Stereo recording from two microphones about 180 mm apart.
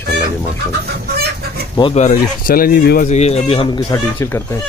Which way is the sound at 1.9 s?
50° left (ahead or behind).